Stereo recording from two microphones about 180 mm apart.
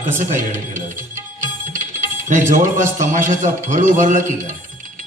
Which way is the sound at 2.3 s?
45° right (ahead or behind).